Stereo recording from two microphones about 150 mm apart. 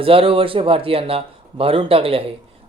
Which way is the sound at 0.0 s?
40° right (ahead or behind).